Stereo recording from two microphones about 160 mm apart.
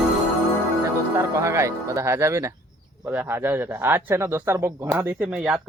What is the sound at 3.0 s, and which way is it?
A man's voice, 15° right (ahead or behind).